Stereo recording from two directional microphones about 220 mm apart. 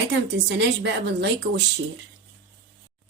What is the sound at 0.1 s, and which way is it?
A woman's voice, 50° right (ahead or behind).